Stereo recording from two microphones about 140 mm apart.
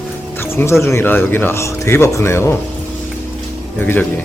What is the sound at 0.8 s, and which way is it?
Speech, 15° left (ahead or behind).